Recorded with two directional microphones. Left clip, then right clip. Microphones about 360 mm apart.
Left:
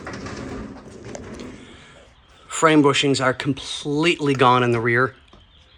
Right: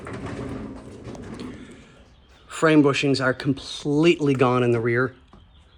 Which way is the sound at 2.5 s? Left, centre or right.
Centre.